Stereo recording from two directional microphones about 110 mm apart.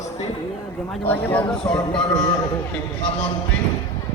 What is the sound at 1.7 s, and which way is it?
Speech, 40° left (ahead or behind).